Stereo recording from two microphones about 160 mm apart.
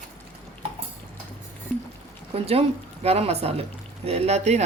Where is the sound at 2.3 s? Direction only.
40° right (ahead or behind).